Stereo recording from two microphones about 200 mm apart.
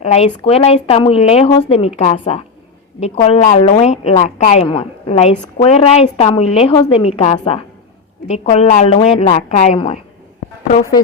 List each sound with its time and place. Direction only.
0.0 s a woman's voice: 30° left (ahead or behind)